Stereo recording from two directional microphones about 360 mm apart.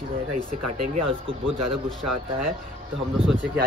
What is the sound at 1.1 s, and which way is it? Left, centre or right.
Speech, centre.